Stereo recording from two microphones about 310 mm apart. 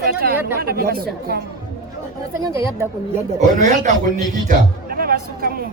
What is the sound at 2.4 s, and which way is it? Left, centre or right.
Speech, centre.